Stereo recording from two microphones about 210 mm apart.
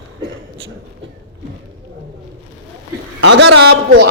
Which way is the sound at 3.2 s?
55° right (ahead or behind).